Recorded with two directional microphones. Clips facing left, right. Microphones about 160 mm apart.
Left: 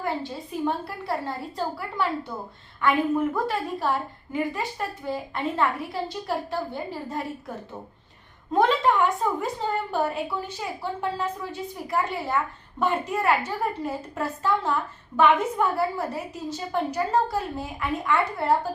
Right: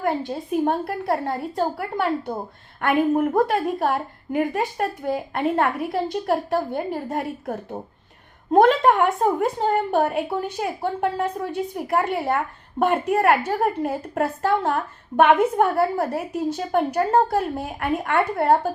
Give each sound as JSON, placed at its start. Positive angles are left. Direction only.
{"t": 0.3, "sound": "a woman's voice", "side_deg": -55}